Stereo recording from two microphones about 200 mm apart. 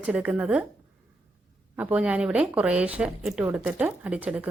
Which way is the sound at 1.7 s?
5° right (ahead or behind).